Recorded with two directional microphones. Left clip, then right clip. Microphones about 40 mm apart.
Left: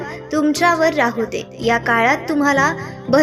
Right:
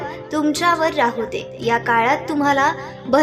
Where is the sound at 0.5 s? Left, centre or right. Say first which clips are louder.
Left 2 dB; left.